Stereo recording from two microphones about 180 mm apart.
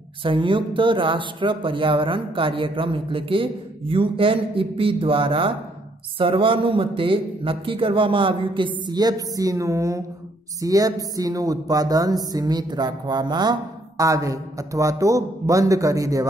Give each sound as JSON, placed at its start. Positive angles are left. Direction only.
{"t": 0.2, "sound": "speech", "side_deg": -30}